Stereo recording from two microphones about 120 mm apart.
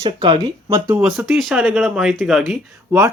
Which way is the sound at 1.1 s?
5° right (ahead or behind).